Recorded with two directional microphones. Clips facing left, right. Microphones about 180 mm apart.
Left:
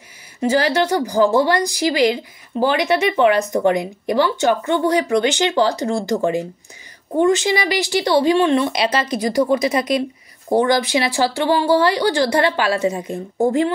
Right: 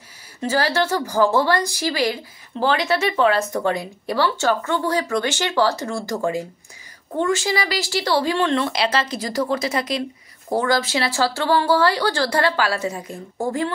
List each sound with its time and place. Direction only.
0.4 s speech: 15° left (ahead or behind)
7.2 s speech: 20° left (ahead or behind)